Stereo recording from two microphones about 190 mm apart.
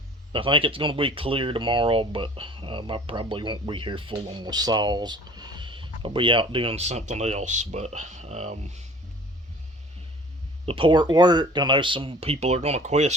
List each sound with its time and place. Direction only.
0.3 s speech: 25° right (ahead or behind)
10.7 s speech: 25° right (ahead or behind)